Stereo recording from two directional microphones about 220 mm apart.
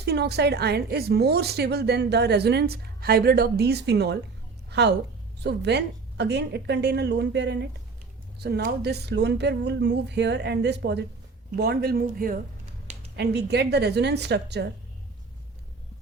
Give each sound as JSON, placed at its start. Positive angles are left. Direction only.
{"t": 0.0, "sound": "a woman's voice", "side_deg": -50}